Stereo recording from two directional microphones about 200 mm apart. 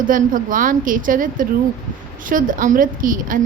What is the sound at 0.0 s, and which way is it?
A woman's voice, 40° right (ahead or behind).